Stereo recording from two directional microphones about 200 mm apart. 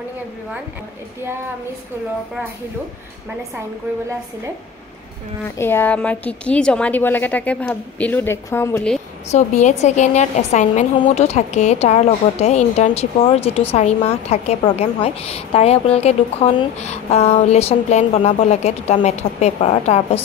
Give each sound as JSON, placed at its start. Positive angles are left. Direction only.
{"t": 5.6, "sound": "a woman's voice", "side_deg": 10}
{"t": 9.3, "sound": "speech", "side_deg": 35}